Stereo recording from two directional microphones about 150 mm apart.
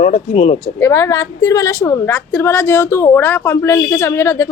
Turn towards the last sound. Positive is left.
turn(degrees=20)  # may be behind; listen again after turning